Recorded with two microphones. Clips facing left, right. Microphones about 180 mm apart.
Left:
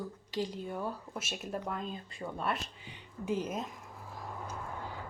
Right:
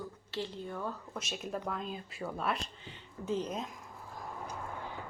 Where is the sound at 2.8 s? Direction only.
10° left (ahead or behind).